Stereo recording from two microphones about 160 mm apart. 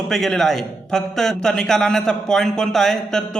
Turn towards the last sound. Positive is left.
turn(degrees=0)  # may be behind; listen again after turning